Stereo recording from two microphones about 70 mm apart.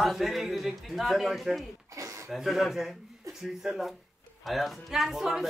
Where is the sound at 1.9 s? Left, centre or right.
Right.